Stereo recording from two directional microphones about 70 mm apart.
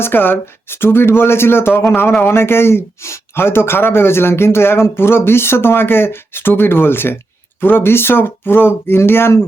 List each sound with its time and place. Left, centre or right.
0.0 s speech: left